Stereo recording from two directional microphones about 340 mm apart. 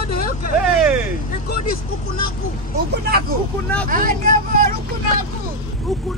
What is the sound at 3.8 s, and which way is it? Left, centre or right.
Speech, right.